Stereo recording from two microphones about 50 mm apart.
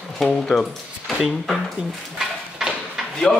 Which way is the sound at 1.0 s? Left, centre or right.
Centre.